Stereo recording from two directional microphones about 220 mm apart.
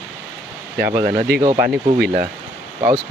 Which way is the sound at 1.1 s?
45° right (ahead or behind).